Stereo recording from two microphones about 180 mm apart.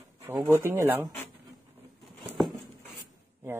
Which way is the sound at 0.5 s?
15° right (ahead or behind).